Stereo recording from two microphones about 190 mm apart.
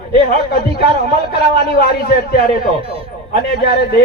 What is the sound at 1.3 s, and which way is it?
A man's voice, 55° left (ahead or behind).